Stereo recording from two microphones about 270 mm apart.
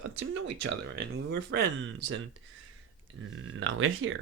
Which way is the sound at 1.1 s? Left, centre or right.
Right.